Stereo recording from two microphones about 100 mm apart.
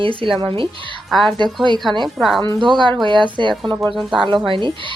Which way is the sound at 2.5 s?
50° right (ahead or behind).